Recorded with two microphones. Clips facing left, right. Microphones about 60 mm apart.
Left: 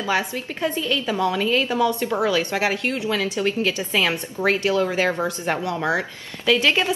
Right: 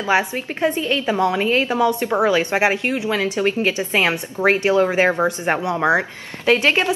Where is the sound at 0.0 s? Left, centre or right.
Right.